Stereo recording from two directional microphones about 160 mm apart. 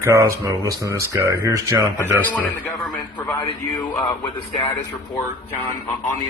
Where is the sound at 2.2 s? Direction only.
10° left (ahead or behind).